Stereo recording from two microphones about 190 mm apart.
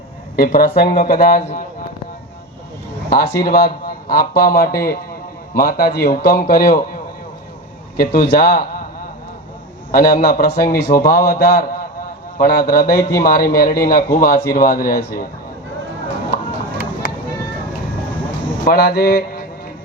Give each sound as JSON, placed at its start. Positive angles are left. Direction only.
{"t": 0.3, "sound": "a man's voice", "side_deg": 50}
{"t": 3.1, "sound": "a man's voice", "side_deg": 55}
{"t": 7.9, "sound": "a man's voice", "side_deg": 50}
{"t": 9.9, "sound": "a man's voice", "side_deg": 50}
{"t": 16.3, "sound": "a sound", "side_deg": 55}
{"t": 18.6, "sound": "mantra", "side_deg": 55}